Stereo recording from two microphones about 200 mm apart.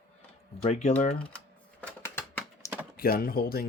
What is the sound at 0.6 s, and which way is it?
Speech, 35° left (ahead or behind).